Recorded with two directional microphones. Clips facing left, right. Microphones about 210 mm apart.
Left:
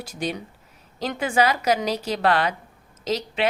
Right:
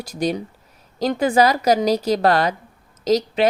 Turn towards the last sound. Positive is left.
turn(degrees=-40)  # may be behind; listen again after turning